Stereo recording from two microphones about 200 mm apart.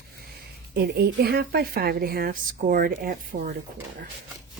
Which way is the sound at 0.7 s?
55° right (ahead or behind).